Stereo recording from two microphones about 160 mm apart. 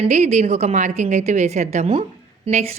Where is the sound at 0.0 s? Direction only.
45° right (ahead or behind).